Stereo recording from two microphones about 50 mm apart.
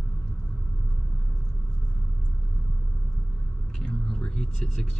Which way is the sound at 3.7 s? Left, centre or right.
Centre.